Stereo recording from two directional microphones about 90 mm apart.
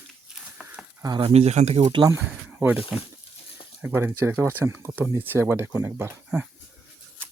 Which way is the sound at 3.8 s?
20° right (ahead or behind).